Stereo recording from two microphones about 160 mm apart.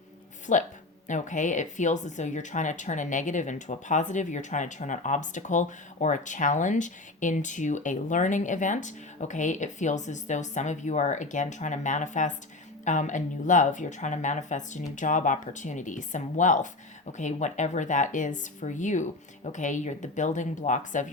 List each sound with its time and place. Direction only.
0.5 s speech: 50° left (ahead or behind)